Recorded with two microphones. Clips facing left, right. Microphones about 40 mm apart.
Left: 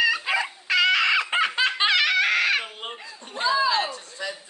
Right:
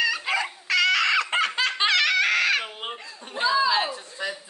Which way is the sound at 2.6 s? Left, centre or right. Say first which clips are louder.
Right 1 dB; centre.